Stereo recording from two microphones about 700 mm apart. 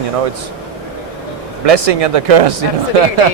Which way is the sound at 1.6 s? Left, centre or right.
Right.